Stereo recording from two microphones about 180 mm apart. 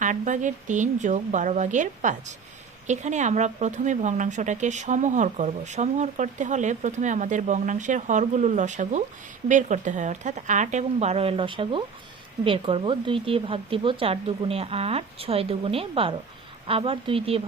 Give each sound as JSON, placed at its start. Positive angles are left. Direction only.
{"t": 0.0, "sound": "speech", "side_deg": -45}